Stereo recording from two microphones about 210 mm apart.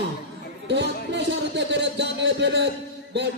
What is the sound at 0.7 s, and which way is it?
A man's voice, 55° right (ahead or behind).